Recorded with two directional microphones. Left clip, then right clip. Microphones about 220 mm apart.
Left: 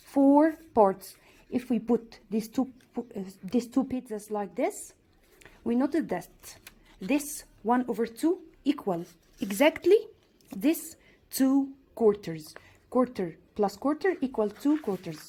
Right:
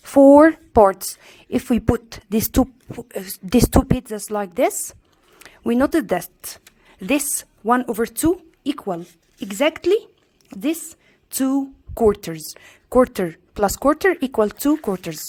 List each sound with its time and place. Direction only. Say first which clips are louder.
0.0 s a woman's voice: right 12 dB; 35° right (ahead or behind)
4.1 s a woman's voice: right 8 dB; 30° right (ahead or behind)
11.9 s a woman's voice: right 7 dB; 30° right (ahead or behind)